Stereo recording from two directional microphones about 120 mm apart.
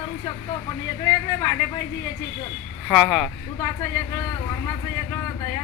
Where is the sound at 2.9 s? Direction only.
Centre (ahead or behind).